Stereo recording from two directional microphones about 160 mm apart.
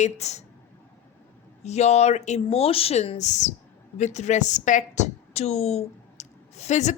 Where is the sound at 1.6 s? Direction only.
45° left (ahead or behind).